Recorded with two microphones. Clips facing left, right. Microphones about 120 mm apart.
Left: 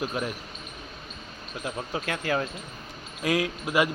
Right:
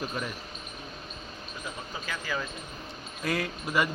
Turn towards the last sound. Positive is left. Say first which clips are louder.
# left 4 dB
turn(degrees=10)  # may be behind; listen again after turning